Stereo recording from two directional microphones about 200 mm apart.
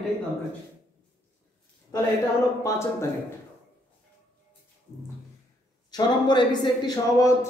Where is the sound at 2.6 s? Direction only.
15° left (ahead or behind).